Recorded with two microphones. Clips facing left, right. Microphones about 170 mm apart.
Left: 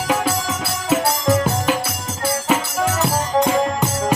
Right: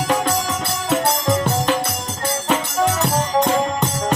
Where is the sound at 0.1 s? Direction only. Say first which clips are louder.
Left 1 dB; 5° left (ahead or behind).